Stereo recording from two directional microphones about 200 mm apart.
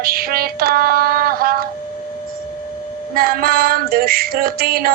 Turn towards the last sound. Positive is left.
turn(degrees=-45)  # may be behind; listen again after turning